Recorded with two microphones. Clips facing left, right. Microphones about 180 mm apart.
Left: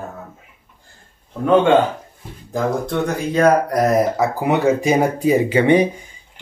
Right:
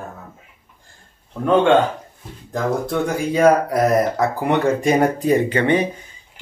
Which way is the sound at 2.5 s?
5° right (ahead or behind).